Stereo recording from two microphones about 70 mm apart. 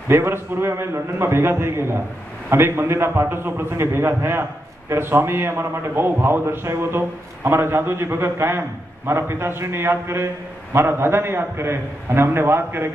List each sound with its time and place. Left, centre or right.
0.1 s a man's voice: right